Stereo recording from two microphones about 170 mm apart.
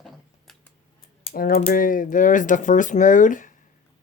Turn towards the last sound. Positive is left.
turn(degrees=50)  # may be behind; listen again after turning